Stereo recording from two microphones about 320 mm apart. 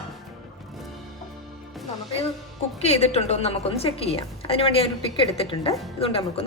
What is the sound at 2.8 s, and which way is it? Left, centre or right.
A woman's voice, centre.